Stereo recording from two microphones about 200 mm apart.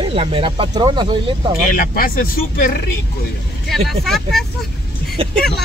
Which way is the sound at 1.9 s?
45° left (ahead or behind).